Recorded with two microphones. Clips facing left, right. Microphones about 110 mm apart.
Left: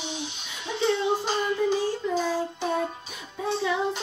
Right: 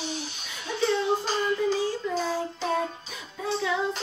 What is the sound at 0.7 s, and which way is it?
Child singing, 20° left (ahead or behind).